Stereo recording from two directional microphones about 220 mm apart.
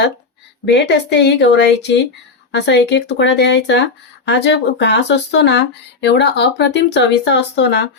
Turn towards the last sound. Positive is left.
turn(degrees=50)  # may be behind; listen again after turning